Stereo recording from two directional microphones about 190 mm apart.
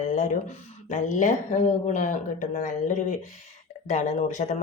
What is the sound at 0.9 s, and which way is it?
A woman's voice, 40° left (ahead or behind).